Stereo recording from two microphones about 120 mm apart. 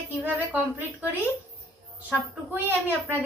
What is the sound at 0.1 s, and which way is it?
Speech, 15° right (ahead or behind).